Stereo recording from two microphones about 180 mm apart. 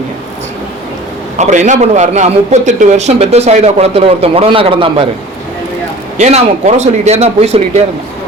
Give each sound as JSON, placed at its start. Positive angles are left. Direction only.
{"t": 1.4, "sound": "a man's voice", "side_deg": -40}
{"t": 6.1, "sound": "a man's voice", "side_deg": -40}